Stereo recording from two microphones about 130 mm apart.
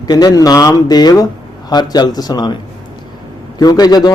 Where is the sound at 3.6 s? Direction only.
30° left (ahead or behind).